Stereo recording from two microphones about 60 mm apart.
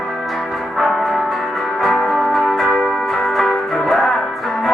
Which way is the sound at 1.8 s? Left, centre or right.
Centre.